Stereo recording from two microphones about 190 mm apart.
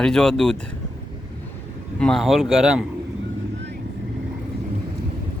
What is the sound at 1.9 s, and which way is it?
Speech, 5° left (ahead or behind).